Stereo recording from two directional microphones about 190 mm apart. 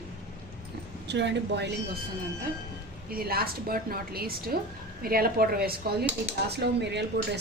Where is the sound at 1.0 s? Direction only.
65° right (ahead or behind).